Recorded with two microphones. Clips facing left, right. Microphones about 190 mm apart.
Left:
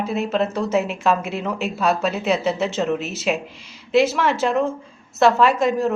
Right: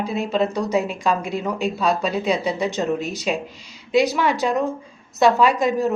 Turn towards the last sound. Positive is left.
turn(degrees=0)  # may be behind; listen again after turning